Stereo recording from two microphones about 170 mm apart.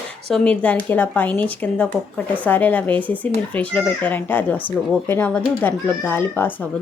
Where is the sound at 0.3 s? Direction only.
5° left (ahead or behind).